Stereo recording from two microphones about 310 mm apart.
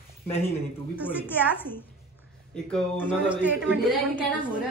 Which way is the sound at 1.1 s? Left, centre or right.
Centre.